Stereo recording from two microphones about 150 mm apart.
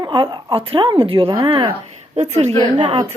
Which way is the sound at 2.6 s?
30° right (ahead or behind).